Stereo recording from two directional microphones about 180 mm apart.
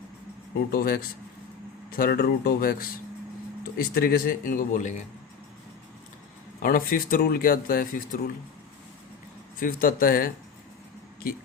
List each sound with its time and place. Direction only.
0.7 s speech: 55° left (ahead or behind)
6.6 s speech: 55° left (ahead or behind)
9.6 s speech: 55° left (ahead or behind)